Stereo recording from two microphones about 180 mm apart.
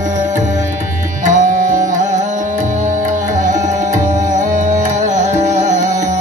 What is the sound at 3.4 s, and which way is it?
Music, 45° right (ahead or behind).